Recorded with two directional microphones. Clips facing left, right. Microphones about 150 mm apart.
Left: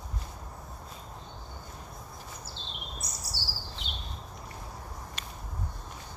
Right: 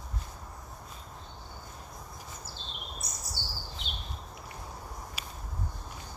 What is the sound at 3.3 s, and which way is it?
Chirp, 90° left.